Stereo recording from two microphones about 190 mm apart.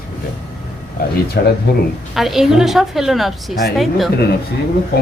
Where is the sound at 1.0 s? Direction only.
55° left (ahead or behind).